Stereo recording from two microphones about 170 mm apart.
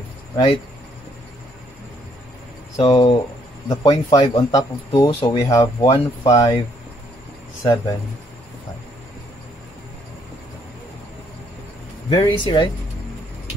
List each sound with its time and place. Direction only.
2.8 s speech: 30° left (ahead or behind)
7.6 s speech: 20° left (ahead or behind)
12.1 s speech: 30° left (ahead or behind)